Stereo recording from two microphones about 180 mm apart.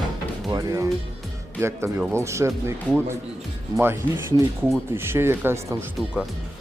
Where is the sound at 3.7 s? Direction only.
15° right (ahead or behind).